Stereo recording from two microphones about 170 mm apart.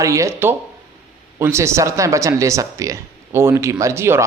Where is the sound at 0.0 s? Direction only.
20° right (ahead or behind).